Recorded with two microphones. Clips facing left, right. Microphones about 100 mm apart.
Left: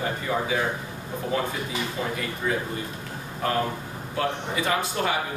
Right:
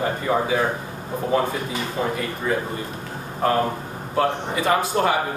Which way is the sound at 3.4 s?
35° right (ahead or behind).